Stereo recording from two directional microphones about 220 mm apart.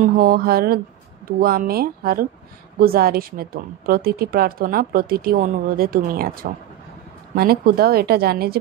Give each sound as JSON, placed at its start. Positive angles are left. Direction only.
{"t": 0.0, "sound": "speech", "side_deg": -40}